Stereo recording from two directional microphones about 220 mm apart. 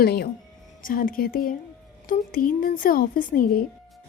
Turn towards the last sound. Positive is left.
turn(degrees=40)  # may be behind; listen again after turning